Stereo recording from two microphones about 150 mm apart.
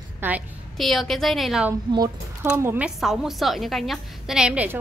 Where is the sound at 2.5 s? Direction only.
15° right (ahead or behind).